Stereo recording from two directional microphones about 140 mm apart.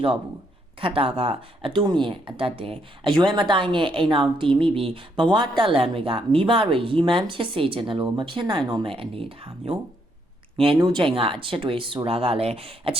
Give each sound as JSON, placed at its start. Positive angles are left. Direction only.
{"t": 0.8, "sound": "speech", "side_deg": -40}
{"t": 10.8, "sound": "speech", "side_deg": -35}